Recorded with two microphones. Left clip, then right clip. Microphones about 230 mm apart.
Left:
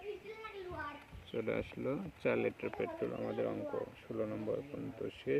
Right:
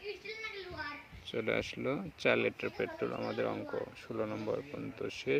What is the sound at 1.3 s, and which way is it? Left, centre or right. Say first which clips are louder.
Speech: right 4 dB; centre.